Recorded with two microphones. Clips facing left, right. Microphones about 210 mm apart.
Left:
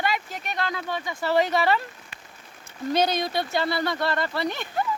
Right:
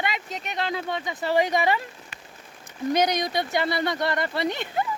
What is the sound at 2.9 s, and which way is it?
Speech, 15° right (ahead or behind).